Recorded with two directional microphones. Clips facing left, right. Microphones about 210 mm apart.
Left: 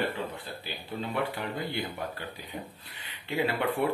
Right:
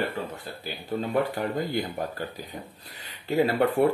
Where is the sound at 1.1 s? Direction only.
40° right (ahead or behind).